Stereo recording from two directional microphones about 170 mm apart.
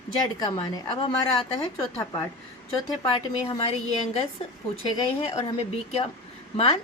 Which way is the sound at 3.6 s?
35° left (ahead or behind).